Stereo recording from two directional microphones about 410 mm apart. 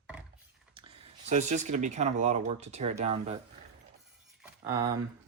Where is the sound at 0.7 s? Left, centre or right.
Centre.